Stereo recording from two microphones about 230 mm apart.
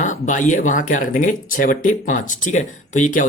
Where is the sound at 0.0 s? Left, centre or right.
Left.